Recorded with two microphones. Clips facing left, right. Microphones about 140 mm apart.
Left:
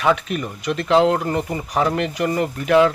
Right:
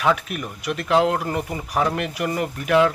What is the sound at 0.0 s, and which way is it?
Speech, 5° right (ahead or behind).